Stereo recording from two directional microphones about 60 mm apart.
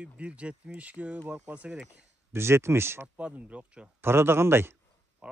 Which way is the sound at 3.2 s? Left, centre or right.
Right.